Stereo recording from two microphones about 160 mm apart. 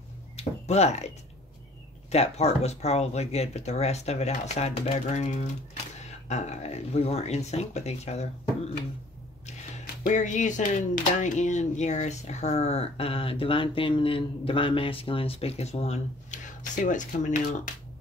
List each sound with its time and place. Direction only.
0.4 s speech: 40° left (ahead or behind)
10.0 s speech: 50° left (ahead or behind)